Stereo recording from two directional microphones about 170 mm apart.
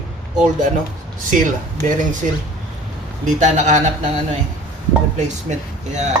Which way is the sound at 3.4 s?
45° right (ahead or behind).